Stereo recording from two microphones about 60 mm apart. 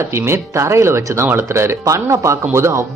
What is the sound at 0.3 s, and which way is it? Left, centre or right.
Speech, right.